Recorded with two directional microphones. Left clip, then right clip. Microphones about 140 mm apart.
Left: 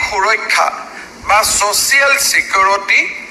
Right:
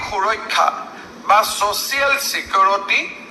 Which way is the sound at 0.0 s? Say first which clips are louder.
Left 6 dB; 25° left (ahead or behind).